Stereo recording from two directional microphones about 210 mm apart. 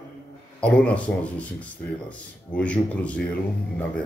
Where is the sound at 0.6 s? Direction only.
5° left (ahead or behind).